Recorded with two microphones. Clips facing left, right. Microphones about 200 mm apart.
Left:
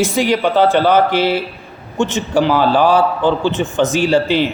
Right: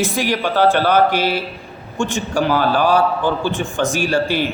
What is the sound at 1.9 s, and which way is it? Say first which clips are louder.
A man's voice: left 4 dB; 20° left (ahead or behind).